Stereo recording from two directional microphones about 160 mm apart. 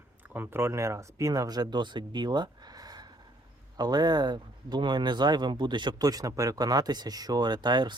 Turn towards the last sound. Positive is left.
turn(degrees=-25)  # may be behind; listen again after turning